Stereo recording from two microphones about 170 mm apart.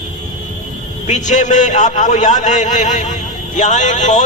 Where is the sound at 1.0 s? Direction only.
45° left (ahead or behind).